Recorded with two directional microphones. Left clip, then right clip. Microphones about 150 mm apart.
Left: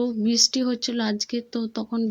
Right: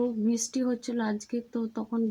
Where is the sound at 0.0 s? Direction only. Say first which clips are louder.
Left 7 dB; 20° left (ahead or behind).